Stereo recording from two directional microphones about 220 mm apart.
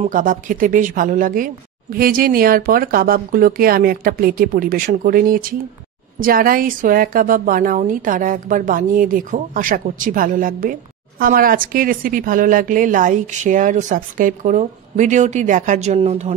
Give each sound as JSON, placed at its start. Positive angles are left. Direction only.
{"t": 0.0, "sound": "a woman's voice", "side_deg": -35}